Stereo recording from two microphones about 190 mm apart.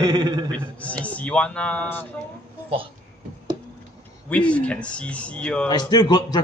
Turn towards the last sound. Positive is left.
turn(degrees=20)  # may be behind; listen again after turning